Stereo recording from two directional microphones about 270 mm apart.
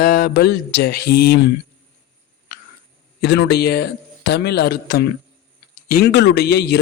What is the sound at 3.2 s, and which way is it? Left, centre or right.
Speech, left.